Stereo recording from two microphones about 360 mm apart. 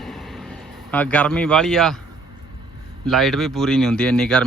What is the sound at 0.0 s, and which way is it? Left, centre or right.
Vehicle, centre.